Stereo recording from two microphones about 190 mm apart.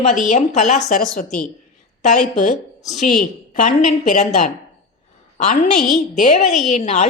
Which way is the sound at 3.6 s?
40° left (ahead or behind).